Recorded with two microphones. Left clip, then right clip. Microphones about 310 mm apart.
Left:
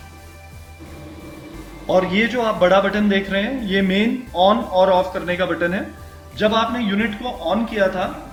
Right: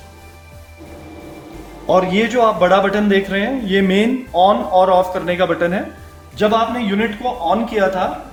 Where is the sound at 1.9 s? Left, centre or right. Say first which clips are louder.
Right 3 dB; right.